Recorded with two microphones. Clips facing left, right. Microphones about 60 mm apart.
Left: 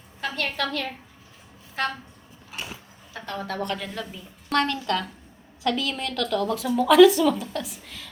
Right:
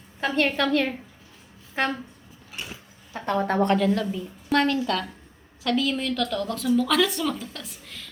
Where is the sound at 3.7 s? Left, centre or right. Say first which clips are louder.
Right 11 dB; centre.